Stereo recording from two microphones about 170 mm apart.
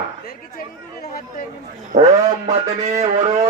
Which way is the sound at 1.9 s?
45° right (ahead or behind).